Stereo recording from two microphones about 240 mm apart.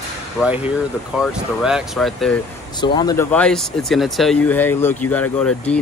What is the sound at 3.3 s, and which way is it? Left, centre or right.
Speech, centre.